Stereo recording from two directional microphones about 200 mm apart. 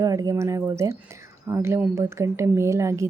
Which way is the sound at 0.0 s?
15° right (ahead or behind).